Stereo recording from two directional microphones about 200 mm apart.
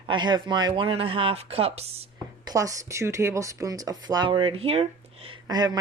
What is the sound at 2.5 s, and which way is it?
Speech, 15° right (ahead or behind).